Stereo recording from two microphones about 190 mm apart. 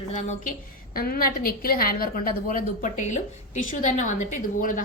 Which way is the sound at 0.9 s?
50° left (ahead or behind).